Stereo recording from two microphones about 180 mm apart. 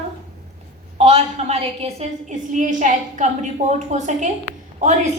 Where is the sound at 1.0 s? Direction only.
35° right (ahead or behind).